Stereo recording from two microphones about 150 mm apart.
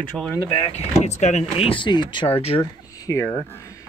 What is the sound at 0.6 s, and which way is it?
Speech, 45° left (ahead or behind).